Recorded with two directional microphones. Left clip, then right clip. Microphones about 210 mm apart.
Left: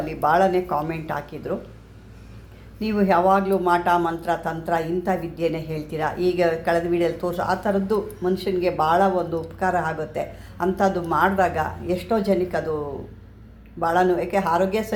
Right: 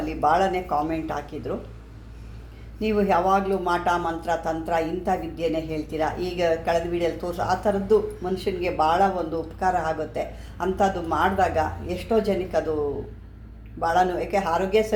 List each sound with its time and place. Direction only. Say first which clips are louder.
0.0 s speech: left 2 dB; 20° left (ahead or behind)
2.8 s speech: left 2 dB; 20° left (ahead or behind)
13.7 s speech: left 2 dB; 25° left (ahead or behind)